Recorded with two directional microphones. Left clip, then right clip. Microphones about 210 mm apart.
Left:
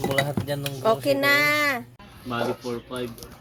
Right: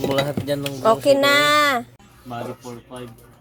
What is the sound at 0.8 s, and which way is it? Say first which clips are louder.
Speech: right 6 dB; centre (ahead or behind).